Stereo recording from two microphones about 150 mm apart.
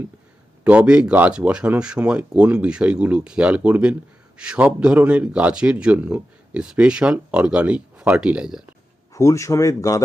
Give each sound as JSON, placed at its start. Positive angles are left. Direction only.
{"t": 0.6, "sound": "speech", "side_deg": -10}
{"t": 9.1, "sound": "speech", "side_deg": 20}